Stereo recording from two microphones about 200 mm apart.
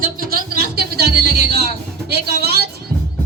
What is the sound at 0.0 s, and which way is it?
Music, 45° right (ahead or behind).